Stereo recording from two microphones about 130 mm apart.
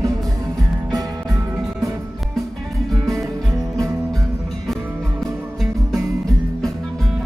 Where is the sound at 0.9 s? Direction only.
25° right (ahead or behind).